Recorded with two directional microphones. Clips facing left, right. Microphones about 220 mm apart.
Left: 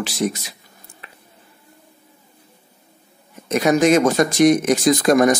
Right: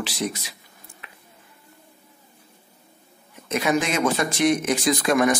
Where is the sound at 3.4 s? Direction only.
40° left (ahead or behind).